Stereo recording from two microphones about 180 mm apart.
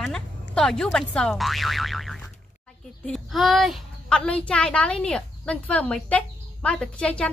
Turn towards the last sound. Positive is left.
turn(degrees=5)  # may be behind; listen again after turning